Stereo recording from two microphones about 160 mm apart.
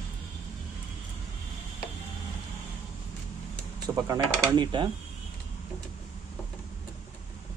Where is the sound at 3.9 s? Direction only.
20° right (ahead or behind).